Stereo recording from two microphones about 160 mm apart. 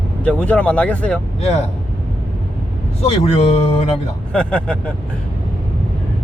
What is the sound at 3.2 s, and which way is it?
Speech, 40° left (ahead or behind).